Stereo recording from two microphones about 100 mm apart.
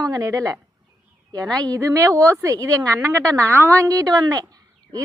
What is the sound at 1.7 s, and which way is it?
A woman's voice, 35° right (ahead or behind).